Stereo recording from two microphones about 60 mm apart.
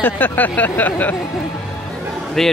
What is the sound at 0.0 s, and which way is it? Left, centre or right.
Speech, left.